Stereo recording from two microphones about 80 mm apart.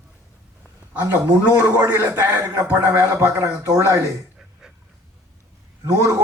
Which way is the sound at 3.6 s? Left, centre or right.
Right.